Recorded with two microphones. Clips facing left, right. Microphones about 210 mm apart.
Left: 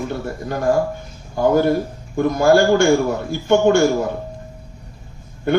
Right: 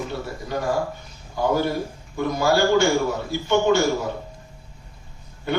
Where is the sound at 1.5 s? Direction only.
50° left (ahead or behind).